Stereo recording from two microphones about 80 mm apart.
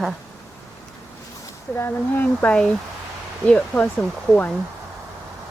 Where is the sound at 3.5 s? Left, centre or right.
Centre.